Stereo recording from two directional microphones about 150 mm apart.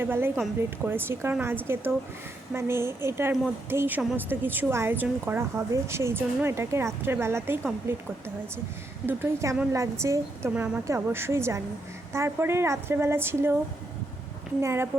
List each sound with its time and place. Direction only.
0.0 s a woman's voice: 15° right (ahead or behind)
9.0 s a woman's voice: 15° right (ahead or behind)
14.6 s a woman's voice: 15° right (ahead or behind)